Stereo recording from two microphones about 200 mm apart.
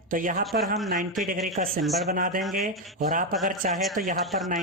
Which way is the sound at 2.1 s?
40° right (ahead or behind).